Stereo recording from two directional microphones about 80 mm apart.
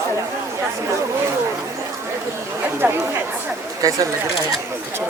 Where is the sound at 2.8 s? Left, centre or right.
Right.